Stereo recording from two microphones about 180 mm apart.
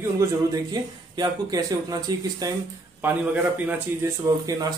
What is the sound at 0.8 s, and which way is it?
Speech, 25° right (ahead or behind).